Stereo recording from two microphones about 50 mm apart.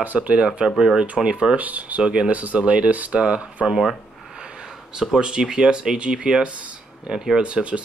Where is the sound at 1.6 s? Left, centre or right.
Right.